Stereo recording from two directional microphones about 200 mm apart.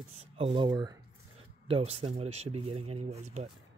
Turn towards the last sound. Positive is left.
turn(degrees=-35)  # may be behind; listen again after turning